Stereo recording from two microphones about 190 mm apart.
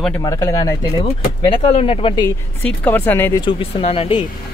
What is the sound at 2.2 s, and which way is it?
Speech, 10° left (ahead or behind).